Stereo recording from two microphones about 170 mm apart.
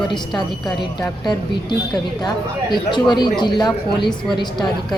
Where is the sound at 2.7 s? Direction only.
25° left (ahead or behind).